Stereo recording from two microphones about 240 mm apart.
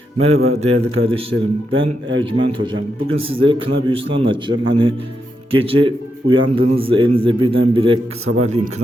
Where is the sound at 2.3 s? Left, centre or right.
Right.